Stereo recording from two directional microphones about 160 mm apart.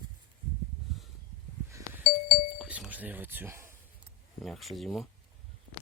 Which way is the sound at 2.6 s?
5° right (ahead or behind).